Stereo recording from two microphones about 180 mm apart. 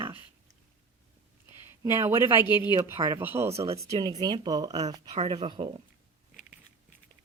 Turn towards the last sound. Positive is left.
turn(degrees=-30)  # may be behind; listen again after turning